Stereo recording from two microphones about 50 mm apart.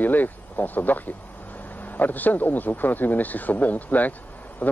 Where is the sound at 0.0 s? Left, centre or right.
Left.